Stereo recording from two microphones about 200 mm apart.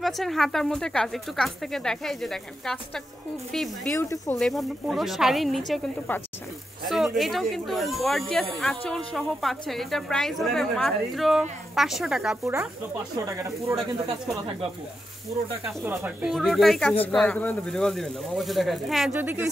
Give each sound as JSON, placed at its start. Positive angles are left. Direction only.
{"t": 0.0, "sound": "speech", "side_deg": 0}
{"t": 3.9, "sound": "speech", "side_deg": 10}
{"t": 15.6, "sound": "speech", "side_deg": -10}